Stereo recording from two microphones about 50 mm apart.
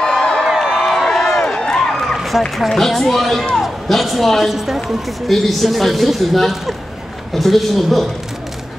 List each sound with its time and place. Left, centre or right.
0.2 s a sound: centre
0.6 s crowd: centre
2.1 s run: centre
2.7 s a man's voice: centre
4.8 s a man's voice: centre